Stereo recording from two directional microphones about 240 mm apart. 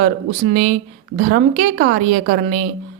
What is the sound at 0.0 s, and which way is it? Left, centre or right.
Speech, right.